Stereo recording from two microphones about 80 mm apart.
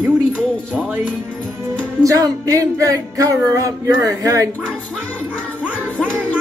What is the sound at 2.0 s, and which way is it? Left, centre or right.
Music, right.